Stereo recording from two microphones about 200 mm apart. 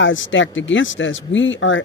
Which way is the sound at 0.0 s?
70° left (ahead or behind).